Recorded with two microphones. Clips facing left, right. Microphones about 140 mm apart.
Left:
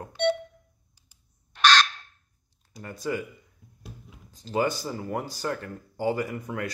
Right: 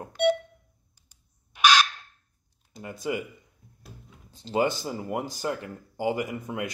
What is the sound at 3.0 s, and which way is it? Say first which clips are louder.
Speech: even; 15° right (ahead or behind).